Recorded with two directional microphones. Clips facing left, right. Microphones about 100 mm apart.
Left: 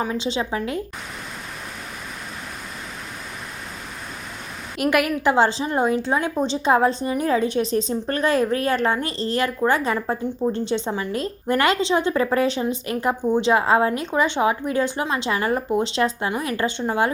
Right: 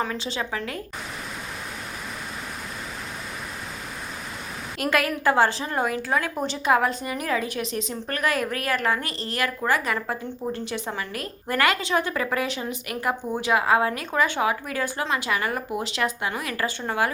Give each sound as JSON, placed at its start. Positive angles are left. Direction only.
{"t": 0.0, "sound": "a woman's voice", "side_deg": 20}
{"t": 4.8, "sound": "a woman's voice", "side_deg": 15}